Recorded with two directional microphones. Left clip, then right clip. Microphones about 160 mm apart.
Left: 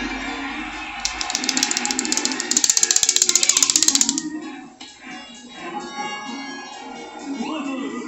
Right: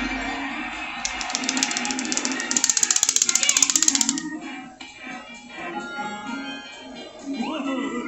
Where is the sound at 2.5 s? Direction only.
85° right.